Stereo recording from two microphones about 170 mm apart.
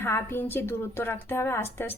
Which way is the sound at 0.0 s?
15° left (ahead or behind).